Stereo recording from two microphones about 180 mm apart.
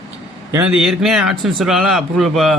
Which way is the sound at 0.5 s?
5° right (ahead or behind).